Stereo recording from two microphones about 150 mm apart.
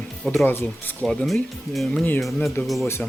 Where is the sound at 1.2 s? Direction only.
Centre (ahead or behind).